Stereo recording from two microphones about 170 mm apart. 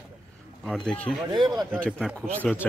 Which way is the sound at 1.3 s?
25° right (ahead or behind).